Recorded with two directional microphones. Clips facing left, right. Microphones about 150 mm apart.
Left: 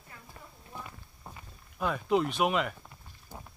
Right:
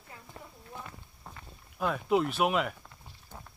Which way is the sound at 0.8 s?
15° left (ahead or behind).